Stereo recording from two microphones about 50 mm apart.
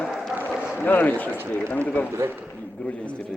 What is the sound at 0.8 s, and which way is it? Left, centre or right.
A man's voice, left.